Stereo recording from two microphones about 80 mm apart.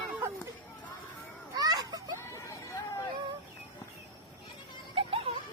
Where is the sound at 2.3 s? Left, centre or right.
Left.